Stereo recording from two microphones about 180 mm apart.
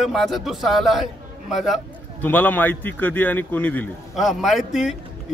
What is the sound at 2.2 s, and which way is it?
A man's voice, 10° left (ahead or behind).